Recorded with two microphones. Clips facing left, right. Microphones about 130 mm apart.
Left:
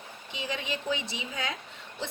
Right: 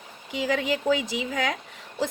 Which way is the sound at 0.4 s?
90° right.